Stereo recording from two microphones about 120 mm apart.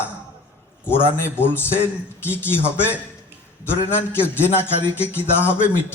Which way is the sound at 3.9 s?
20° left (ahead or behind).